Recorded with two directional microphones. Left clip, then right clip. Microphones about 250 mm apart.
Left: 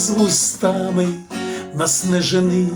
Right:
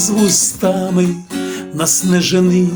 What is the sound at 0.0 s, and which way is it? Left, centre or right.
Speech, right.